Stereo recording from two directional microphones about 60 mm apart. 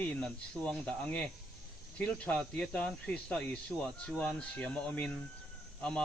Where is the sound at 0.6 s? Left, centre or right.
Centre.